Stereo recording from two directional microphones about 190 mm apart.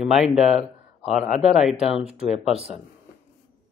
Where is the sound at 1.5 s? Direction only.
Centre (ahead or behind).